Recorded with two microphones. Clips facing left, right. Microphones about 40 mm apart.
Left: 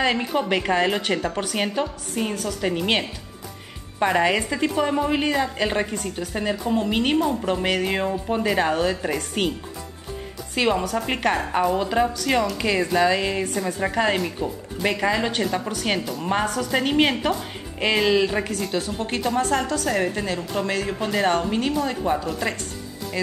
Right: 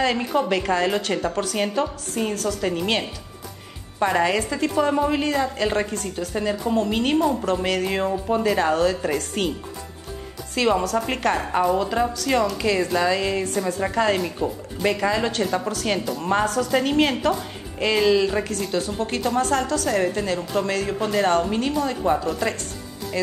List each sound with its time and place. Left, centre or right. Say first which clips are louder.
0.0 s a woman's voice: right 1 dB; centre
10.5 s a woman's voice: right 1 dB; centre
15.4 s speech: right 1 dB; centre
15.7 s a woman's voice: right 1 dB; centre
18.5 s a woman's voice: right 1 dB; centre